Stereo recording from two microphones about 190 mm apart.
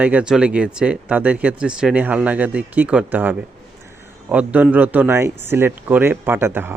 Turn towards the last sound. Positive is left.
turn(degrees=-10)  # may be behind; listen again after turning